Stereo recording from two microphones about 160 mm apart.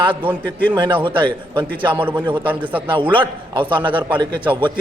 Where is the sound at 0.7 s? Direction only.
30° right (ahead or behind).